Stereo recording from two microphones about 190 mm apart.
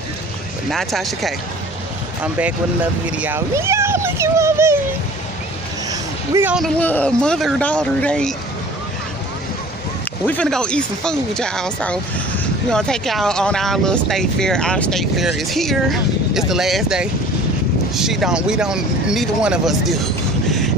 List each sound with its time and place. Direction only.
0.7 s speech: centre (ahead or behind)
5.9 s a sound: 15° right (ahead or behind)
6.5 s speech: 5° left (ahead or behind)
10.2 s speech: 5° left (ahead or behind)